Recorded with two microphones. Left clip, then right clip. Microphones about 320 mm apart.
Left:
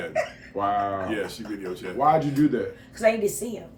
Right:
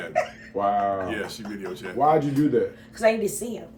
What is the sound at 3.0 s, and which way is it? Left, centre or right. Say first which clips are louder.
Speech: even; centre.